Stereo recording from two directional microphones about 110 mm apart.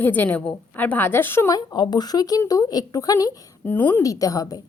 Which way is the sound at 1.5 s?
40° left (ahead or behind).